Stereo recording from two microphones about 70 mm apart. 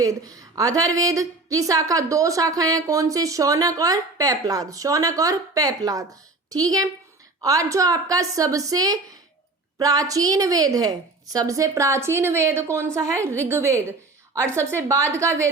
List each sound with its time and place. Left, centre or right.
0.0 s a woman's voice: right
7.4 s a woman's voice: right